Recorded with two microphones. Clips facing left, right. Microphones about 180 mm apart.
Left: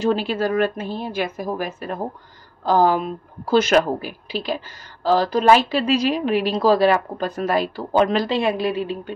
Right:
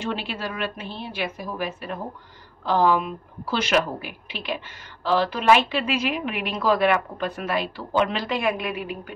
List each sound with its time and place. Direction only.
0.0 s a woman's voice: 40° left (ahead or behind)
8.4 s a woman's voice: 30° left (ahead or behind)